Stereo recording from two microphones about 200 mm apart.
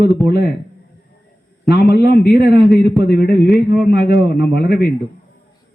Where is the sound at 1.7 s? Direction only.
50° left (ahead or behind).